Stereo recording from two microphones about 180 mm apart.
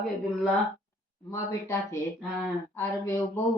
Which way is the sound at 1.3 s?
15° left (ahead or behind).